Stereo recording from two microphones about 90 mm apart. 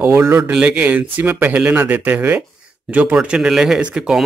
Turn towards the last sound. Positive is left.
turn(degrees=-10)  # may be behind; listen again after turning